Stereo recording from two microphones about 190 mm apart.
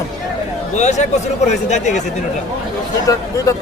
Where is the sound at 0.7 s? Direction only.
40° left (ahead or behind).